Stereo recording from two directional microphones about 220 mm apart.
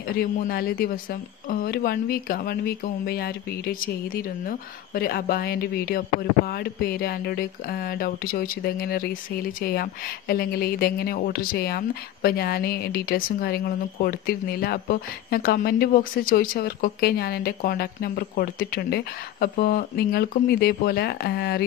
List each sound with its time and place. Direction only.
0.2 s a woman's voice: 45° left (ahead or behind)